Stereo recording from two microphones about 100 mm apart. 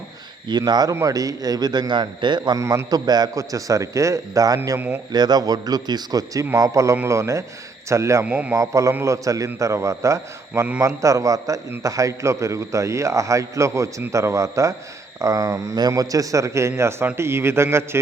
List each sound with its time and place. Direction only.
0.4 s a man's voice: 45° right (ahead or behind); by 8.2 s 30° right (ahead or behind)
8.2 s a man's voice: 15° right (ahead or behind)
8.5 s a man's voice: 30° right (ahead or behind)